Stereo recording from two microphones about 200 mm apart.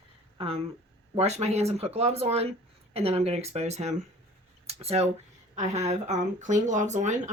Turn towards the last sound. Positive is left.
turn(degrees=-35)  # may be behind; listen again after turning